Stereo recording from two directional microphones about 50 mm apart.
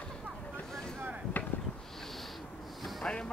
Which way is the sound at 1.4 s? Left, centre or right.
Left.